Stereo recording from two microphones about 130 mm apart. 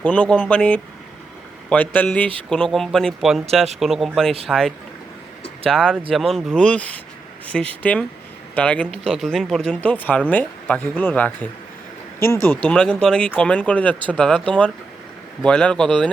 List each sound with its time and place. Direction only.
0.0 s speech: 10° left (ahead or behind)
5.7 s speech: 5° left (ahead or behind)
12.6 s speech: 10° left (ahead or behind)
15.4 s speech: 10° left (ahead or behind)